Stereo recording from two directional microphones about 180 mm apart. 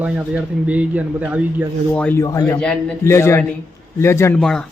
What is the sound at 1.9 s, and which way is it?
Speech, 10° left (ahead or behind).